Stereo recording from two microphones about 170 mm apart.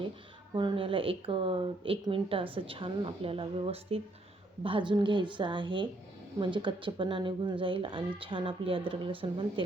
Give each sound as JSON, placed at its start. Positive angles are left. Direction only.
{"t": 0.5, "sound": "a woman's voice", "side_deg": -30}